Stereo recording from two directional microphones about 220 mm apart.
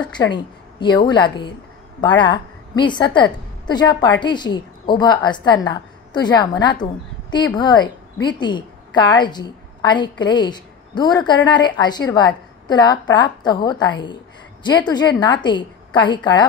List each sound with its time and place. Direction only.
0.3 s a woman's voice: 20° left (ahead or behind)